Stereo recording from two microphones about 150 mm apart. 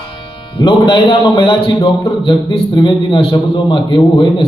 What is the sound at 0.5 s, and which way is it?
A man's voice, 35° left (ahead or behind).